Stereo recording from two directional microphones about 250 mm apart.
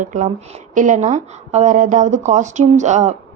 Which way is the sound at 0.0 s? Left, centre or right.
Right.